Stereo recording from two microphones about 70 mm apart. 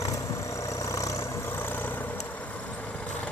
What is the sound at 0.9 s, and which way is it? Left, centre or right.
Vehicle, left.